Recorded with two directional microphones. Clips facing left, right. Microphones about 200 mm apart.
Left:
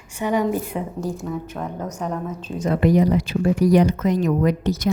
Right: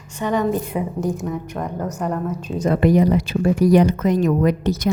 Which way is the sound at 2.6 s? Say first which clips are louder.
Right 2 dB; 50° right (ahead or behind).